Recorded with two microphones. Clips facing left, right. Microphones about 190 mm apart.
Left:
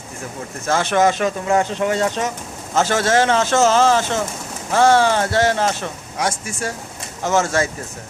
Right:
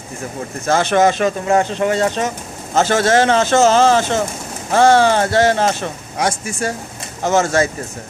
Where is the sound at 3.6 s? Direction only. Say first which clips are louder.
Right 2 dB; 30° right (ahead or behind).